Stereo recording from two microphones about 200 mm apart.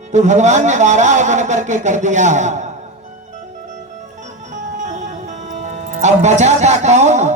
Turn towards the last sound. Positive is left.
turn(degrees=-35)  # may be behind; listen again after turning